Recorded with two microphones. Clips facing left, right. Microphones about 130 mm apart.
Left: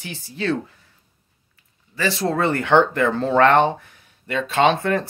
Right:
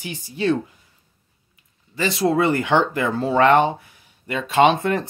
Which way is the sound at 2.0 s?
15° right (ahead or behind).